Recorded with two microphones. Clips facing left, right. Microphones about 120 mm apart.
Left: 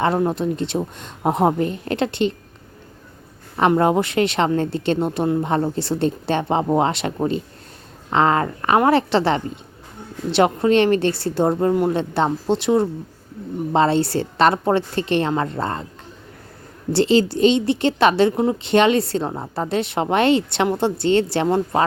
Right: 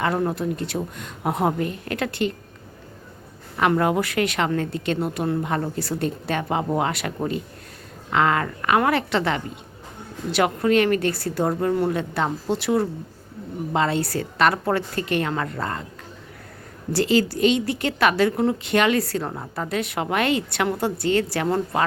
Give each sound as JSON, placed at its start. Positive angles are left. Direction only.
{"t": 0.2, "sound": "a woman's voice", "side_deg": 25}
{"t": 3.8, "sound": "a woman's voice", "side_deg": 30}
{"t": 16.9, "sound": "a woman's voice", "side_deg": 25}